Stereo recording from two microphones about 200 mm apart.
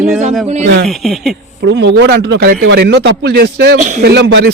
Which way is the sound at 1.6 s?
60° right (ahead or behind).